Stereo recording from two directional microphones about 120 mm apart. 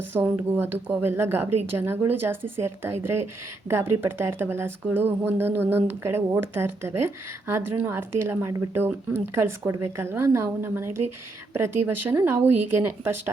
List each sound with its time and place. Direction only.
0.1 s speech: 15° right (ahead or behind)